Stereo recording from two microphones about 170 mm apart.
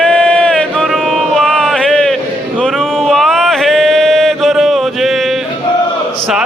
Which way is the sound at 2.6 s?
Centre (ahead or behind).